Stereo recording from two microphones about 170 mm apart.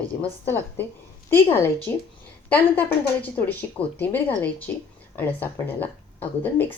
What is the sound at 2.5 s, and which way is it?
Speech, 10° left (ahead or behind).